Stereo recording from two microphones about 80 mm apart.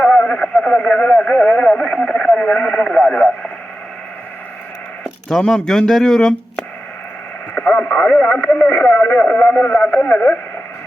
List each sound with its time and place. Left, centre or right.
0.0 s radio: centre
5.4 s speech: centre
7.5 s radio: centre
9.7 s speech: centre